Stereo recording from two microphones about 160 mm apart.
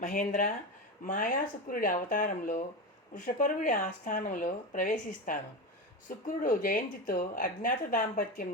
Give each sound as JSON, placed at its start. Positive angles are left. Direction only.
{"t": 0.0, "sound": "speech", "side_deg": 55}